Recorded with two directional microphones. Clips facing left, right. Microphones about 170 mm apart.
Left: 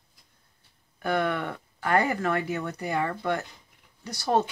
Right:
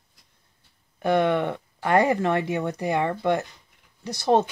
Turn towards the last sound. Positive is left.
turn(degrees=-25)  # may be behind; listen again after turning